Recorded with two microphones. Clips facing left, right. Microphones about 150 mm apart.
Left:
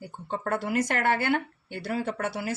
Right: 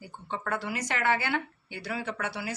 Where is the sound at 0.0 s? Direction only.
50° left (ahead or behind).